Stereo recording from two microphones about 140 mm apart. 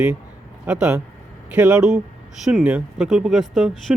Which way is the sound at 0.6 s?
10° right (ahead or behind).